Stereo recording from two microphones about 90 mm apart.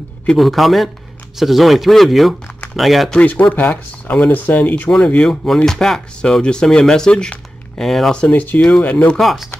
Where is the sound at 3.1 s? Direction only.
15° left (ahead or behind); by 9.5 s centre (ahead or behind).